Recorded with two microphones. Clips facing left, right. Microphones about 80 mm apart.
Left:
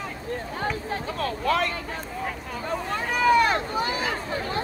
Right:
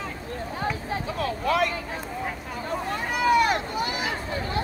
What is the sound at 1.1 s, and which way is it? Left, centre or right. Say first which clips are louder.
Vehicle: even; left.